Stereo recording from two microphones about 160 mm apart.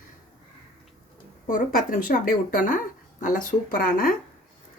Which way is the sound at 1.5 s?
55° left (ahead or behind).